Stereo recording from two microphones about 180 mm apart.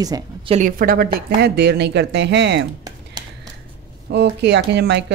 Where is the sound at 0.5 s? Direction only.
50° right (ahead or behind).